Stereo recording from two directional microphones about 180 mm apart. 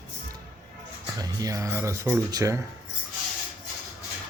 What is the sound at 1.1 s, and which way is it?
Speech, 20° right (ahead or behind).